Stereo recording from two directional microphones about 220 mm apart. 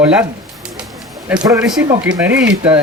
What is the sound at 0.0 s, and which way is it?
Speech, 5° right (ahead or behind).